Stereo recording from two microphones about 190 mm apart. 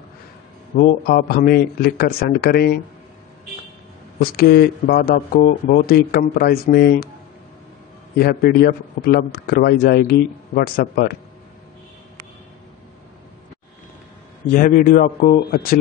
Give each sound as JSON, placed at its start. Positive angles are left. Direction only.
{"t": 0.7, "sound": "a man's voice", "side_deg": 50}
{"t": 4.2, "sound": "a man's voice", "side_deg": 55}
{"t": 8.2, "sound": "a man's voice", "side_deg": 50}
{"t": 14.5, "sound": "a man's voice", "side_deg": 45}